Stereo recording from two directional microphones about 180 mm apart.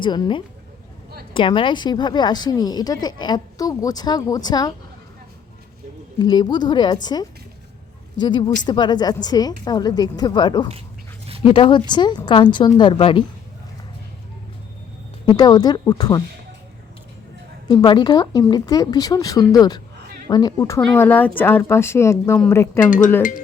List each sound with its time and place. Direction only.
0.0 s a woman's voice: 25° left (ahead or behind)
6.1 s a woman's voice: 25° left (ahead or behind)
15.3 s a woman's voice: 20° left (ahead or behind)
17.7 s a woman's voice: 25° left (ahead or behind)